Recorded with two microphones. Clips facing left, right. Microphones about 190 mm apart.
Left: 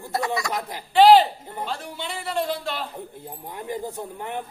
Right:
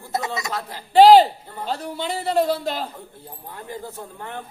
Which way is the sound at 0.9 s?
40° right (ahead or behind).